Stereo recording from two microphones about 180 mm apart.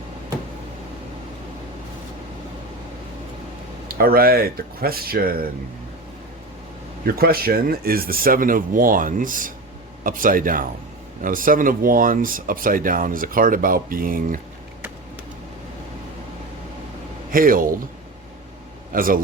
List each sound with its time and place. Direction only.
3.8 s speech: 55° right (ahead or behind)
7.0 s speech: 55° right (ahead or behind)
17.3 s speech: 50° right (ahead or behind)
18.9 s speech: 50° right (ahead or behind)